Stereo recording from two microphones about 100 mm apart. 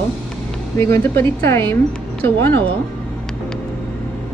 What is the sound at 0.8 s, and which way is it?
A woman's voice, 25° left (ahead or behind).